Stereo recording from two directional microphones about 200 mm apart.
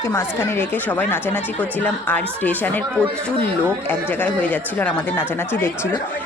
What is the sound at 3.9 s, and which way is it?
Speech, 10° left (ahead or behind).